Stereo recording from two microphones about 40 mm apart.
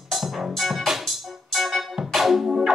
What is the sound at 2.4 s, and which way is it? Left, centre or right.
Music, centre.